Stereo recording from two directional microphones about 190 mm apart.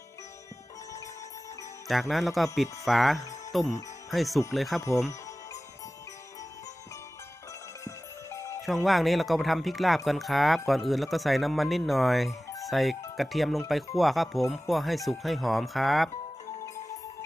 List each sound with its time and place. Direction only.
1.9 s speech: centre (ahead or behind)
7.9 s music: 15° left (ahead or behind)
8.6 s speech: centre (ahead or behind)